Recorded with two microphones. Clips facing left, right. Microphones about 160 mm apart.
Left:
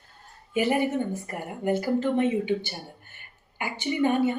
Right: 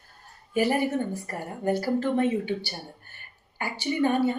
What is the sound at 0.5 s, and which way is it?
Speech, 20° left (ahead or behind).